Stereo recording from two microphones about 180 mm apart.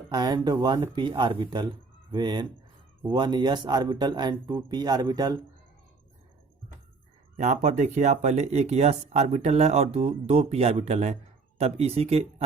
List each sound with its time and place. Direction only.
0.1 s speech: 25° right (ahead or behind)
7.3 s speech: 40° right (ahead or behind)